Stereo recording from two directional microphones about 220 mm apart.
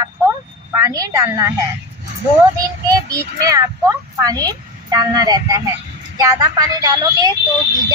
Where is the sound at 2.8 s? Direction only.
15° right (ahead or behind).